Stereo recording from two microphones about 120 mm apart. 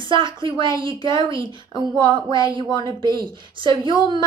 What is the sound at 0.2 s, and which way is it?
A woman's voice, 40° right (ahead or behind).